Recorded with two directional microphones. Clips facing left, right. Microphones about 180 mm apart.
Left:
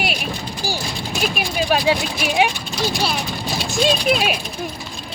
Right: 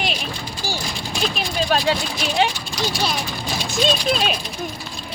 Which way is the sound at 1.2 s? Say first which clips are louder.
Left 1 dB; 10° left (ahead or behind).